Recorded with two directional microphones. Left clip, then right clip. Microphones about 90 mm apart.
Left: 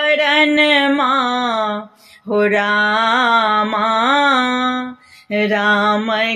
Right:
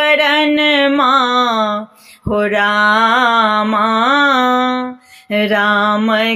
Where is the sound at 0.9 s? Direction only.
35° right (ahead or behind).